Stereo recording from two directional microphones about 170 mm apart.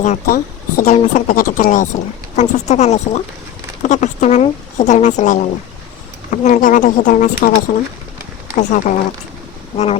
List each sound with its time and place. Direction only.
0.0 s speech: 50° left (ahead or behind)
0.9 s speech: 45° left (ahead or behind)
9.7 s speech: 35° left (ahead or behind)